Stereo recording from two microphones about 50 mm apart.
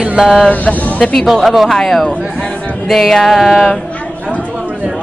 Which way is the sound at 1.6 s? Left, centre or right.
Centre.